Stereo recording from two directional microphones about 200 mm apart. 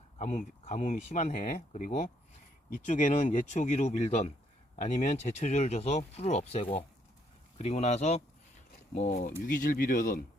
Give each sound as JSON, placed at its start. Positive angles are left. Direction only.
{"t": 0.2, "sound": "speech", "side_deg": 30}